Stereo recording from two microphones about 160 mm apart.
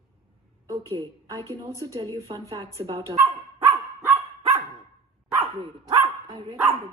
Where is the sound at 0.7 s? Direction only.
20° right (ahead or behind).